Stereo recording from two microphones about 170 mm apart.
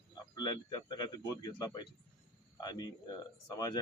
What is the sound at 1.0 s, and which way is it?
A man's voice, 25° left (ahead or behind).